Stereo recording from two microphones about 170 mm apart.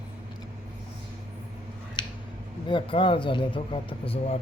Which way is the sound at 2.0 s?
25° left (ahead or behind).